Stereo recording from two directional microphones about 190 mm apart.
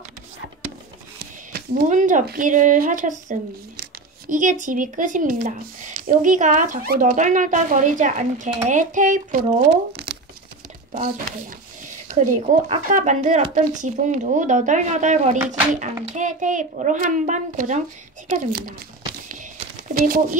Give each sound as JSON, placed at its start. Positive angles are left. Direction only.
{"t": 1.2, "sound": "a woman's voice", "side_deg": -45}
{"t": 10.1, "sound": "a sound", "side_deg": -55}
{"t": 12.5, "sound": "a woman's voice", "side_deg": -45}
{"t": 19.9, "sound": "speech", "side_deg": -50}